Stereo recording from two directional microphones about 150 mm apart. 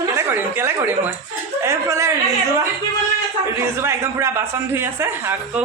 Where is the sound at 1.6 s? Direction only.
20° right (ahead or behind).